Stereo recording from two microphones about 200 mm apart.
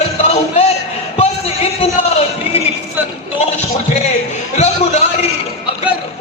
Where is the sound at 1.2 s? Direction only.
30° left (ahead or behind).